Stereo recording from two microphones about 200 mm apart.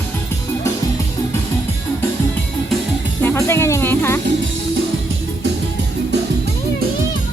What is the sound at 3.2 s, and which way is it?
Music, 10° left (ahead or behind).